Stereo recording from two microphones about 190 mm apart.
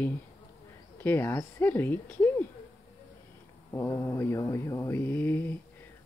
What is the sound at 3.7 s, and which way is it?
Speech, 15° left (ahead or behind).